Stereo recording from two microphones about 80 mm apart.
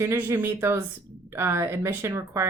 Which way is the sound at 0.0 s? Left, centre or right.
Right.